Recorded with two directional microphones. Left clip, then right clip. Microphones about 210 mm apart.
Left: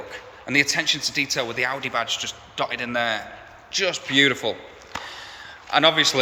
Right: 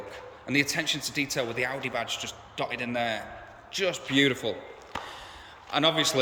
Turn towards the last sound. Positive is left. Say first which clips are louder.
# left 7 dB
turn(degrees=-5)  # may be behind; listen again after turning